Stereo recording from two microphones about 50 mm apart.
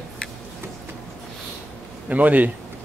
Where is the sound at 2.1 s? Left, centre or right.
Right.